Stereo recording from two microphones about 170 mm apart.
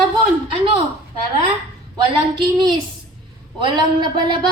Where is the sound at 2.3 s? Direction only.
25° right (ahead or behind).